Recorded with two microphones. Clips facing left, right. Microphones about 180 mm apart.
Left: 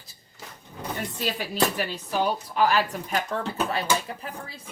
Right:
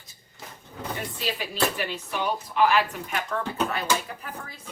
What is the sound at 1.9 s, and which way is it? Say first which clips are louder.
Speech: left 3 dB; 35° left (ahead or behind).